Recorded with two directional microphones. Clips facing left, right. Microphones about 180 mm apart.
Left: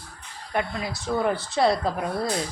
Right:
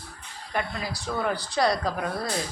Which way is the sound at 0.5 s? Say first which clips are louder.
Left 3 dB; 20° left (ahead or behind).